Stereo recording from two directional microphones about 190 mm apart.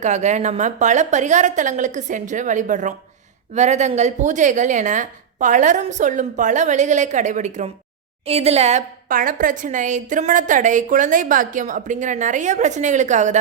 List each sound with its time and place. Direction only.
0.0 s a woman's voice: 40° right (ahead or behind)